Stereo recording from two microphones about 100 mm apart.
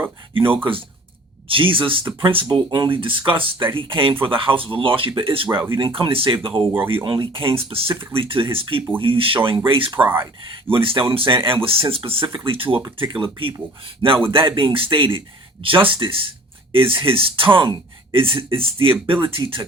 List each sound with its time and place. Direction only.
0.6 s speech: 60° right (ahead or behind)